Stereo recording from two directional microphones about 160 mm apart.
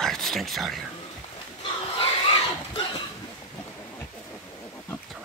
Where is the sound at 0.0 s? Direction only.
Centre (ahead or behind).